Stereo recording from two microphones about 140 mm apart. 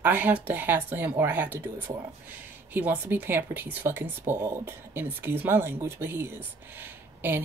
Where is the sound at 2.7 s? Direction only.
15° right (ahead or behind).